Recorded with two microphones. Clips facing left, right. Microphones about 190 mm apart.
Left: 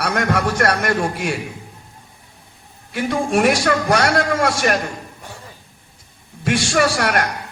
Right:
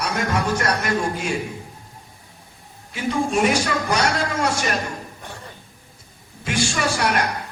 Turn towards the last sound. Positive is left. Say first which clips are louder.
# left 4 dB
turn(degrees=60)  # may be behind; listen again after turning